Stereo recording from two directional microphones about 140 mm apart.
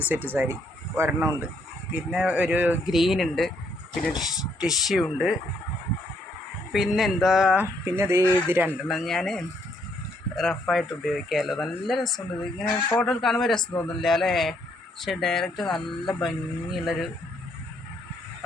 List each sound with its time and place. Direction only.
0.1 s speech: 15° right (ahead or behind)
6.7 s speech: centre (ahead or behind)
8.9 s speech: centre (ahead or behind)